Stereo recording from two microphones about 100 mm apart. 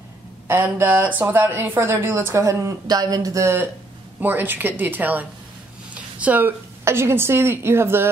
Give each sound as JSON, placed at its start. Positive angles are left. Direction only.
{"t": 0.5, "sound": "speech", "side_deg": -20}
{"t": 4.2, "sound": "a woman's voice", "side_deg": -20}